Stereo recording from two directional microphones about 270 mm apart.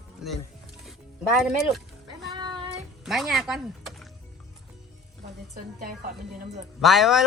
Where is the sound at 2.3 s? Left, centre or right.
Centre.